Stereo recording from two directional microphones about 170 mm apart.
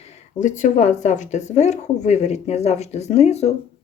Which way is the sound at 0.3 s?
45° left (ahead or behind).